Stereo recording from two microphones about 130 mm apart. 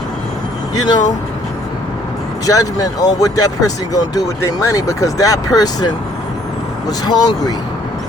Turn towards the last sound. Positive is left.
turn(degrees=30)  # may be behind; listen again after turning